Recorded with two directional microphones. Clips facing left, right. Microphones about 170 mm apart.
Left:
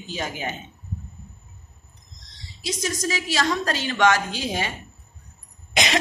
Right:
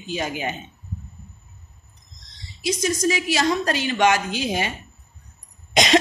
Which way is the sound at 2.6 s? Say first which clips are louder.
Right 6 dB; 15° right (ahead or behind).